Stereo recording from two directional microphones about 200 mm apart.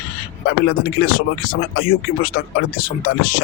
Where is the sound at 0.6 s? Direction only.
50° left (ahead or behind).